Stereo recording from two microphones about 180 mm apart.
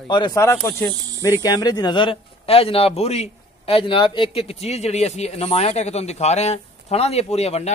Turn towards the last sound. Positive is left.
turn(degrees=35)  # may be behind; listen again after turning